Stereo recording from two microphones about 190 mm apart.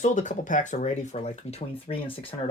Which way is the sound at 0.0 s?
40° left (ahead or behind).